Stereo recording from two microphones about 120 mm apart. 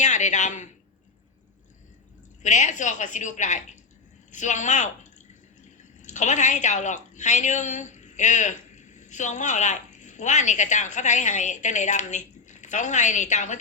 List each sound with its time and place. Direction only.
0.0 s a man's voice: 85° left
2.4 s a woman's voice: 90° left
6.0 s a woman's voice: 85° left